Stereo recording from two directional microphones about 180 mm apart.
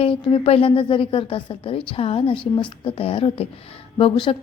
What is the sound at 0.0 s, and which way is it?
A woman's voice, 30° left (ahead or behind).